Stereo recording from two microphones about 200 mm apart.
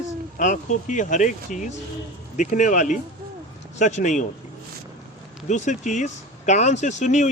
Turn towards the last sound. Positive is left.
turn(degrees=35)  # may be behind; listen again after turning